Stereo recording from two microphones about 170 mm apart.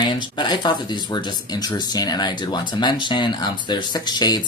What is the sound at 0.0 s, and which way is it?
Speech, 25° left (ahead or behind).